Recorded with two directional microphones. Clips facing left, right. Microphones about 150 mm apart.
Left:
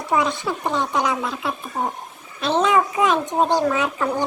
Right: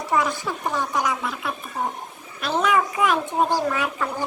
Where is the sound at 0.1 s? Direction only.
20° left (ahead or behind).